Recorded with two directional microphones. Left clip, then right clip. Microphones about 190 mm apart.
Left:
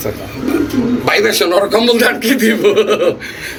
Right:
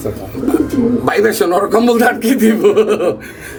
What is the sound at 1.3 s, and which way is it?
A man's voice, 60° right (ahead or behind).